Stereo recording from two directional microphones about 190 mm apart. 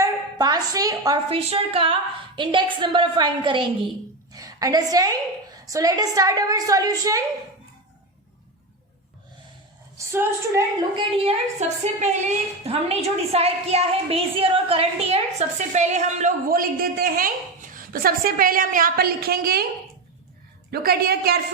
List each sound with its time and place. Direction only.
0.0 s a woman's voice: 20° right (ahead or behind)
10.0 s a woman's voice: 15° right (ahead or behind)
10.9 s a woman's voice: 30° right (ahead or behind); by 19.6 s 55° right (ahead or behind)
20.7 s a woman's voice: 55° right (ahead or behind)